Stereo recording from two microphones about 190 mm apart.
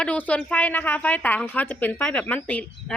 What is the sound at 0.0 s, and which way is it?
A woman's voice, 5° left (ahead or behind).